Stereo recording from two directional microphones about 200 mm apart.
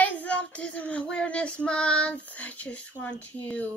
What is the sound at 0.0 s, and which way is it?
Child singing, 5° left (ahead or behind).